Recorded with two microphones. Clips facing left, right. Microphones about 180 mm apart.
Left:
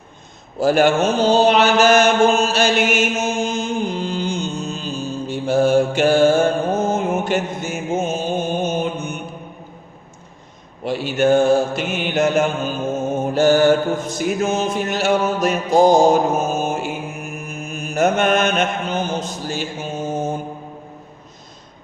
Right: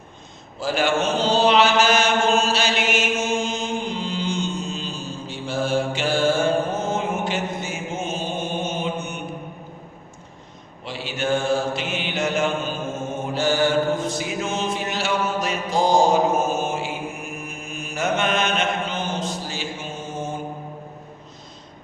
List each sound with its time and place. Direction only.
0.6 s mantra: 45° left (ahead or behind)
10.8 s mantra: 45° left (ahead or behind)